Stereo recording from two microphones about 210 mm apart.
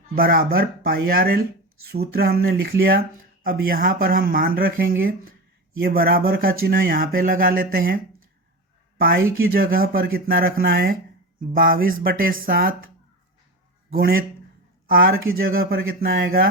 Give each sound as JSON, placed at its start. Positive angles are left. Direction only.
{"t": 0.2, "sound": "speech", "side_deg": -45}
{"t": 13.9, "sound": "speech", "side_deg": -45}